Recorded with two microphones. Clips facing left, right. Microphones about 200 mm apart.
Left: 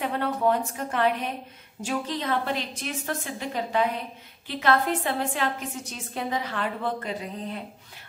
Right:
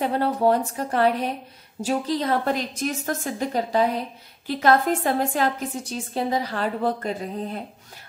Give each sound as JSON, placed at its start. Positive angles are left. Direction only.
{"t": 0.0, "sound": "a woman's voice", "side_deg": -35}